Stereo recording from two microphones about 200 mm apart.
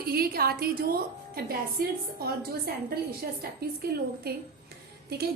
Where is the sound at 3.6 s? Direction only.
50° right (ahead or behind).